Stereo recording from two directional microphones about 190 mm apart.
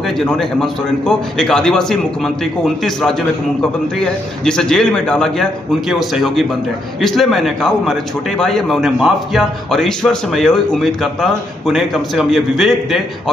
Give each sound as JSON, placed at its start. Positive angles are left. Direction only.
{"t": 0.2, "sound": "a man's voice", "side_deg": 5}